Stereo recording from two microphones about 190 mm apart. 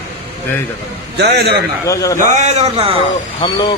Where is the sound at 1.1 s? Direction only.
60° right (ahead or behind).